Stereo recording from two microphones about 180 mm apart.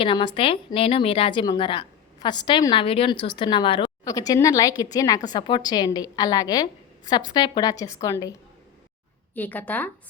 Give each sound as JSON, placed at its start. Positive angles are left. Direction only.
{"t": 0.0, "sound": "a woman's voice", "side_deg": 30}